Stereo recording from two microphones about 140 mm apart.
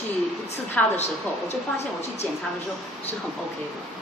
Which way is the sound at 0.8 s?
10° left (ahead or behind).